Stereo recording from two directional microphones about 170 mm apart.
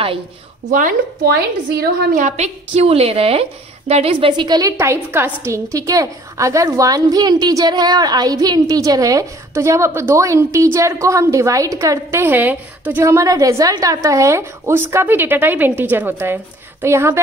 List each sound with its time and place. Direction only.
0.7 s a woman's voice: 50° right (ahead or behind); by 17.2 s 15° right (ahead or behind)